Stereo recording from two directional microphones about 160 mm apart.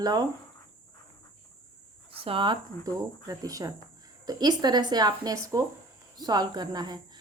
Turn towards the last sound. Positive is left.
turn(degrees=-25)  # may be behind; listen again after turning